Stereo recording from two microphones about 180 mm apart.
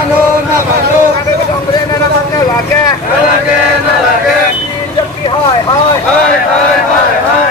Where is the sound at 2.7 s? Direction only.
20° left (ahead or behind).